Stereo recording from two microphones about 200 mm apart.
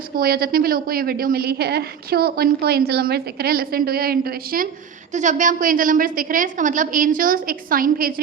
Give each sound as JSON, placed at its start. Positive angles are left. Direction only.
{"t": 0.2, "sound": "a woman's voice", "side_deg": -50}